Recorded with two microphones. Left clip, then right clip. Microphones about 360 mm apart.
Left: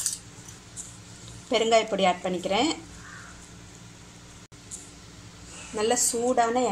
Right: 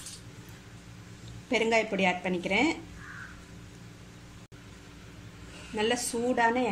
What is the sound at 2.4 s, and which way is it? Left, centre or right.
Speech, left.